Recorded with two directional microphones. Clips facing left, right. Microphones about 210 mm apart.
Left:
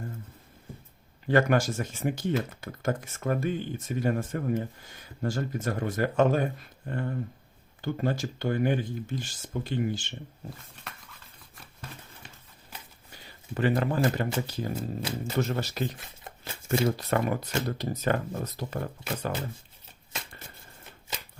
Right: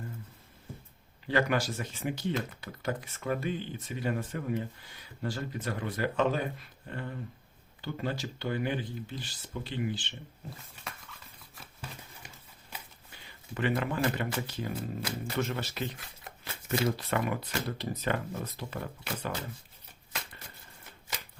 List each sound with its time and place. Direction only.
1.3 s speech: 50° left (ahead or behind)
11.5 s patter: centre (ahead or behind)
13.1 s speech: 40° left (ahead or behind)
14.8 s speech: 25° left (ahead or behind)
15.4 s speech: 40° left (ahead or behind)